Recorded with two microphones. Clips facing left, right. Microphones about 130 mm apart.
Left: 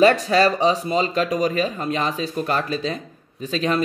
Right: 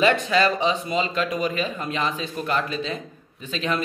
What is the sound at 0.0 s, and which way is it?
Speech, 40° left (ahead or behind).